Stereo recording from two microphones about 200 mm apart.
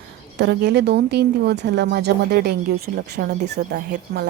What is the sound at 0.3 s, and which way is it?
Speech, 55° right (ahead or behind).